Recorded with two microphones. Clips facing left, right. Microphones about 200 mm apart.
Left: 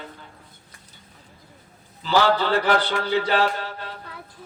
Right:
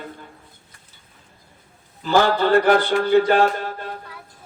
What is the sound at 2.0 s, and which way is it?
Mantra, 50° right (ahead or behind).